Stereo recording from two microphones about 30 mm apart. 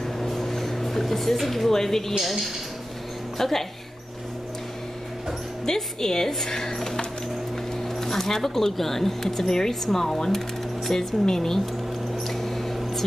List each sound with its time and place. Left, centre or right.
0.0 s a sound: centre
2.1 s speech: centre
3.3 s speech: centre
5.9 s speech: centre
12.3 s mouse: centre